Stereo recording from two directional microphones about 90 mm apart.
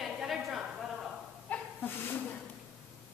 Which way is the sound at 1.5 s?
15° left (ahead or behind).